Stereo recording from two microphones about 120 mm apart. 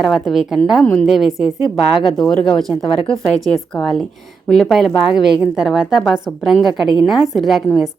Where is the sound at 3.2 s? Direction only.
5° left (ahead or behind).